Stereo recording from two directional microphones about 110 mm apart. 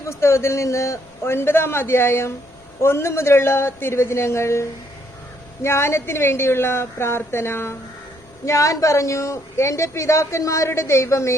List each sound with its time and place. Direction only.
0.0 s speech: 25° left (ahead or behind)
5.6 s speech: 25° left (ahead or behind)